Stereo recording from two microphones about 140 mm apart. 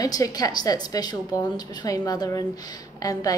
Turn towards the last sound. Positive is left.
turn(degrees=25)  # may be behind; listen again after turning